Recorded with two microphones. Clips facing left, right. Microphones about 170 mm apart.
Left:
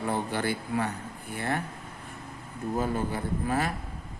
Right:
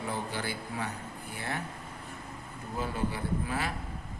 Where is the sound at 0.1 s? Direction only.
55° left (ahead or behind).